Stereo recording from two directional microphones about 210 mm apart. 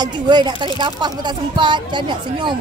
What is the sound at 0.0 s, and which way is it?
Speech, 20° right (ahead or behind).